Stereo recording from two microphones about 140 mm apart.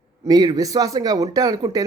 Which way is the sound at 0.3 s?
30° right (ahead or behind).